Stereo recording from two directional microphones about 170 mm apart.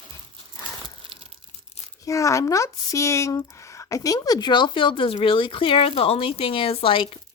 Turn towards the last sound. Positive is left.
turn(degrees=30)  # may be behind; listen again after turning